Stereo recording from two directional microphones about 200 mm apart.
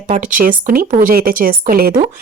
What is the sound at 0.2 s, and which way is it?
Speech, 40° right (ahead or behind).